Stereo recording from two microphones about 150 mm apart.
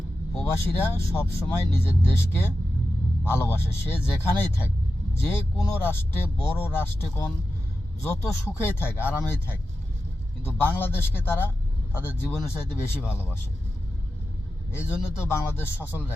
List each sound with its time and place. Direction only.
0.5 s a man's voice: 15° left (ahead or behind)
14.7 s a man's voice: 15° left (ahead or behind)